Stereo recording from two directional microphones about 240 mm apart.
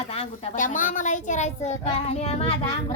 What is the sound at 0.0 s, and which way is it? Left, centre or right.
A woman's voice, left.